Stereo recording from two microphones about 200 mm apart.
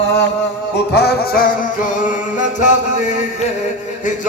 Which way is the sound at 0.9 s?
50° left (ahead or behind).